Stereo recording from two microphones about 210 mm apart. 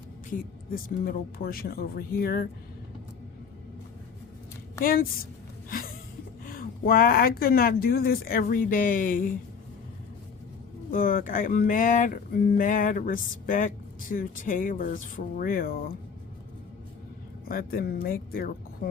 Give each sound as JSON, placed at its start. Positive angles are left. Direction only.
{"t": 0.3, "sound": "speech", "side_deg": 45}
{"t": 4.8, "sound": "speech", "side_deg": 45}
{"t": 6.4, "sound": "speech", "side_deg": 40}
{"t": 10.9, "sound": "speech", "side_deg": 40}
{"t": 17.5, "sound": "speech", "side_deg": 45}